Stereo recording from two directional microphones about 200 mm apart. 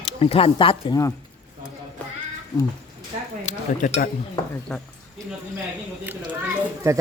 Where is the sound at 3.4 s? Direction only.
35° left (ahead or behind).